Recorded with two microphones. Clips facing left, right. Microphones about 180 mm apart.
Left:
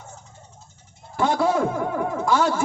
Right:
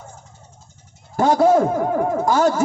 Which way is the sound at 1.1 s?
45° right (ahead or behind).